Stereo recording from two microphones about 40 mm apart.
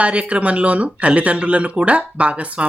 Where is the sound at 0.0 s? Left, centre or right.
Right.